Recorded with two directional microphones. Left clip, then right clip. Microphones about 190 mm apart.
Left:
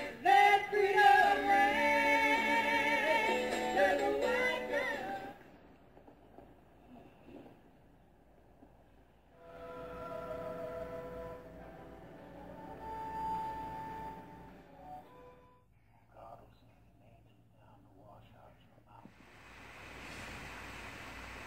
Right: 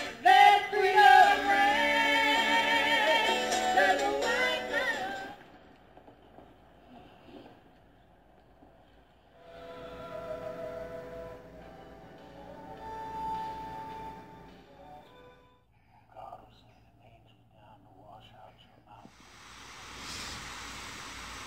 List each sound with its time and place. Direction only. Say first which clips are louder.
0.0 s music: right 6 dB; 5° left (ahead or behind)
9.6 s music: right 1 dB; 5° left (ahead or behind)
12.7 s music: right 2 dB; centre (ahead or behind)